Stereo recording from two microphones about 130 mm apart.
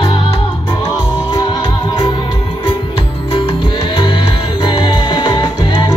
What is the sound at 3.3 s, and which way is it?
Music, 40° left (ahead or behind).